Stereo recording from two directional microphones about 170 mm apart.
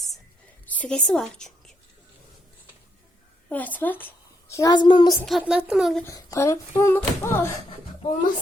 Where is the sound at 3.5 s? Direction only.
10° left (ahead or behind); by 5.2 s 25° left (ahead or behind).